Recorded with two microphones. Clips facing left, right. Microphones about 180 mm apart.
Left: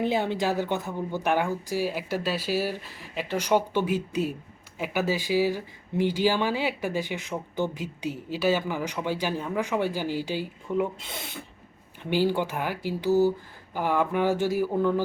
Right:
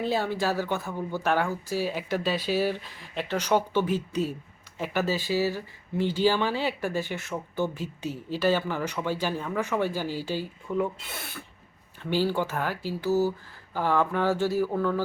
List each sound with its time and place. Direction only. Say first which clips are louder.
0.0 s speech: left 1 dB; 20° left (ahead or behind)